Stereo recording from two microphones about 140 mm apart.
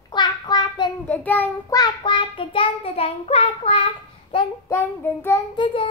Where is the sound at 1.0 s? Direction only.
10° left (ahead or behind).